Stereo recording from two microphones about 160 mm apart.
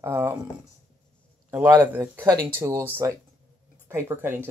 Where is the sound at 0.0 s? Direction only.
15° right (ahead or behind).